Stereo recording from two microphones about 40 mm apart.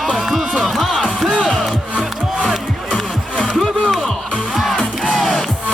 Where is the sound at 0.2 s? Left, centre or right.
Centre.